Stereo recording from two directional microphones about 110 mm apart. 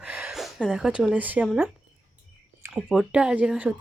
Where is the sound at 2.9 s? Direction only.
5° right (ahead or behind).